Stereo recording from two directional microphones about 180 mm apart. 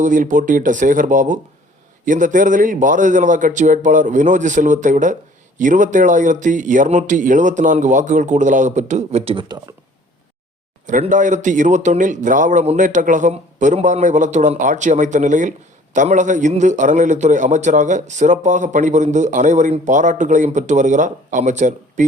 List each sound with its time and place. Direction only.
0.0 s a man's voice: 45° right (ahead or behind); by 9.7 s 25° right (ahead or behind)
10.8 s a man's voice: 45° right (ahead or behind)